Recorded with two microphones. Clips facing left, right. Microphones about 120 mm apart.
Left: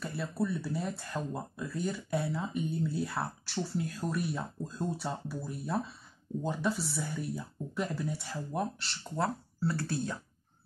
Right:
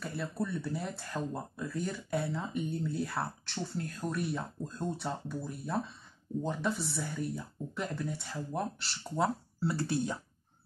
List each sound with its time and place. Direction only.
0.0 s speech: centre (ahead or behind)
9.2 s speech: 15° right (ahead or behind)